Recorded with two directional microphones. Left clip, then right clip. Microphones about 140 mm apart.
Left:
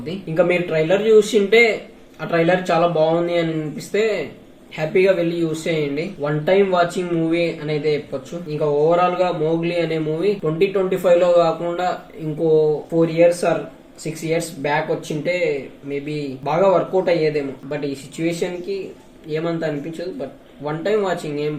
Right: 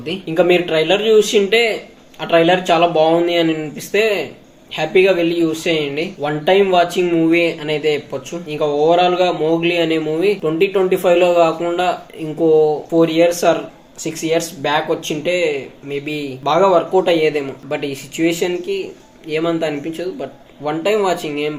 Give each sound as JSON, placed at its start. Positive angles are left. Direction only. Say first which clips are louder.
{"t": 0.0, "sound": "speech", "louder": "right 3 dB", "side_deg": -15}
{"t": 13.0, "sound": "speech", "louder": "right 2 dB", "side_deg": -20}
{"t": 16.5, "sound": "speech", "louder": "right 4 dB", "side_deg": -20}